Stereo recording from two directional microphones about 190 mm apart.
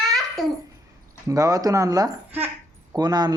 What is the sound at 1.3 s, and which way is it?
Speech, 20° right (ahead or behind).